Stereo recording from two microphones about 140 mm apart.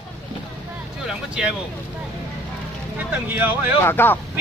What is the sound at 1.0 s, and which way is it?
Speech, 5° right (ahead or behind).